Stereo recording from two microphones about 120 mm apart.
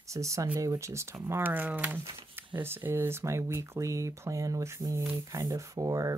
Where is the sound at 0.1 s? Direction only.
25° right (ahead or behind).